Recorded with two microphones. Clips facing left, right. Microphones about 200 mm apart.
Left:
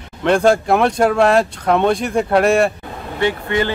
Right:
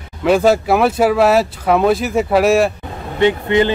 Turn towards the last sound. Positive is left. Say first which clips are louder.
# right 5 dB
turn(degrees=-20)  # may be behind; listen again after turning